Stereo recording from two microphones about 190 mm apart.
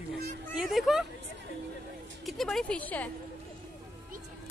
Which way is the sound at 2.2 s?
Centre (ahead or behind).